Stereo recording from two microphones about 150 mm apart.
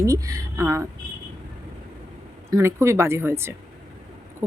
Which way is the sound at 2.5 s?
20° right (ahead or behind).